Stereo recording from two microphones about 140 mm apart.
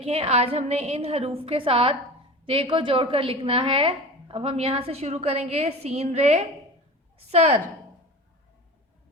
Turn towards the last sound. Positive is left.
turn(degrees=-50)  # may be behind; listen again after turning